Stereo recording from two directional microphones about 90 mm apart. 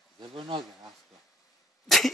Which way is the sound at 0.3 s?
70° right (ahead or behind).